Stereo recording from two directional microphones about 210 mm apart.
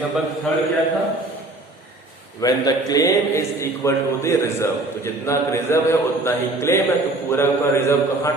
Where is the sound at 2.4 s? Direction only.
15° left (ahead or behind).